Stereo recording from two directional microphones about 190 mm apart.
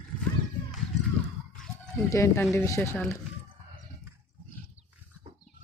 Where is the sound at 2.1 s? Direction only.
15° left (ahead or behind).